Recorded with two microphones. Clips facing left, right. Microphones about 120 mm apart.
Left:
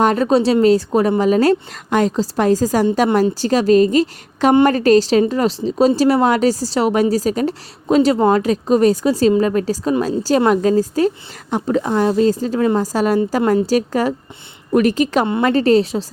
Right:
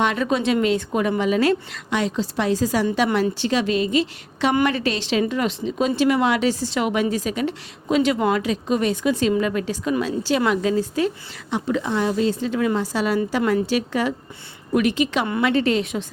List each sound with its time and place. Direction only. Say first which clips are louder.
0.0 s speech: left 7 dB; 40° left (ahead or behind)